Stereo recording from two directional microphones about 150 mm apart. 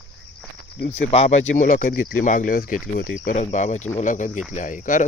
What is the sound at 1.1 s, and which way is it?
Speech, 45° left (ahead or behind).